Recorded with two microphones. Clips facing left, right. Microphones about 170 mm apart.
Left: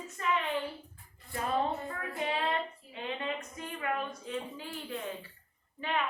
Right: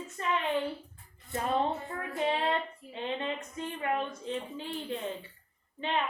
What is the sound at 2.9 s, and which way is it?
A child's voice, 25° right (ahead or behind).